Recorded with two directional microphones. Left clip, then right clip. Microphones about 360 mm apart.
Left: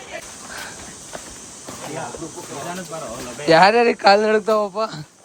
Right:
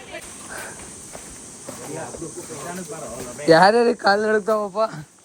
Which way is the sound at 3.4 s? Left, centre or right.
Centre.